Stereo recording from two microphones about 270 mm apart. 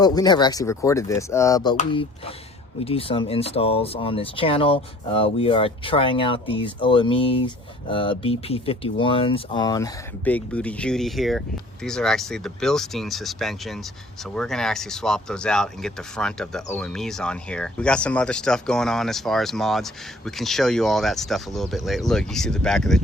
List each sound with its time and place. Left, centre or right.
0.0 s speech: centre
1.7 s speech: left; by 23.0 s centre